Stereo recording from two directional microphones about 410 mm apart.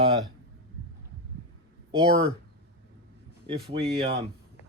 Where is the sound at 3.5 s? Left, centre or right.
Centre.